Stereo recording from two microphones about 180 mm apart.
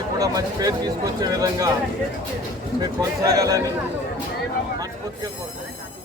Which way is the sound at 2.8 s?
20° right (ahead or behind).